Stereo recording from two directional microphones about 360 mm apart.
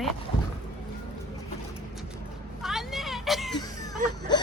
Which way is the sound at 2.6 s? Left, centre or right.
Centre.